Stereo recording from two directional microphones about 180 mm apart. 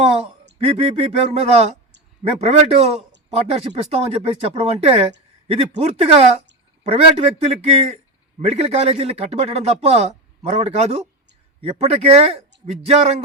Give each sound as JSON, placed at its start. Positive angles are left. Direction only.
{"t": 0.6, "sound": "speech", "side_deg": -35}